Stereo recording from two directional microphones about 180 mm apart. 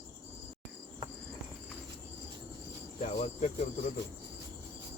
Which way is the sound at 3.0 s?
40° left (ahead or behind).